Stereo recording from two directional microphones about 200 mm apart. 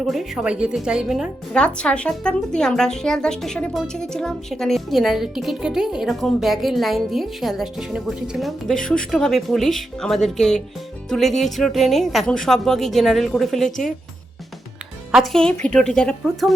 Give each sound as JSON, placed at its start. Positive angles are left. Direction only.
{"t": 0.0, "sound": "a woman's voice", "side_deg": 0}
{"t": 15.3, "sound": "a woman's voice", "side_deg": 5}